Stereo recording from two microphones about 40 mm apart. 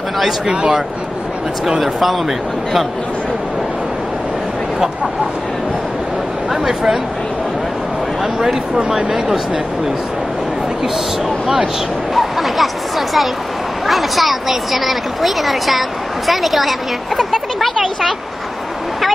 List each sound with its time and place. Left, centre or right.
0.5 s speech: right
1.8 s a woman's voice: centre
8.2 s speech: centre
8.7 s speech: right
11.2 s a woman's voice: centre